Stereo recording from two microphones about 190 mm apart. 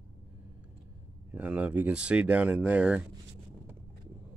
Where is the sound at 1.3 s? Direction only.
10° right (ahead or behind).